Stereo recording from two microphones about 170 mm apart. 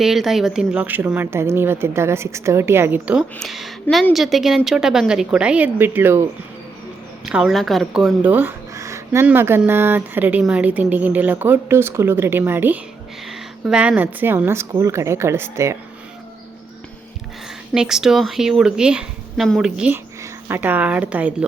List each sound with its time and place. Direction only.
0.0 s speech: centre (ahead or behind)
7.3 s speech: 5° right (ahead or behind)
17.7 s speech: 5° right (ahead or behind)